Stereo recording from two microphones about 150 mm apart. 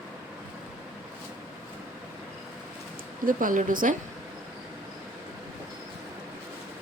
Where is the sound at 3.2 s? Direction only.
60° right (ahead or behind).